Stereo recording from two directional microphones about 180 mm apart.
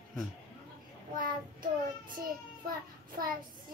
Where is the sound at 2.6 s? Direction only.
55° right (ahead or behind).